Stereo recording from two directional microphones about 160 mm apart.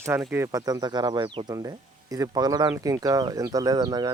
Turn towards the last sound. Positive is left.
turn(degrees=-25)  # may be behind; listen again after turning